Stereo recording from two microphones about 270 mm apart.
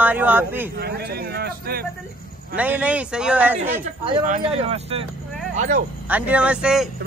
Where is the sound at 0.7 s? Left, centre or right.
Right.